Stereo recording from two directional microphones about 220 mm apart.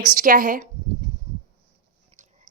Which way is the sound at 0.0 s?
40° right (ahead or behind).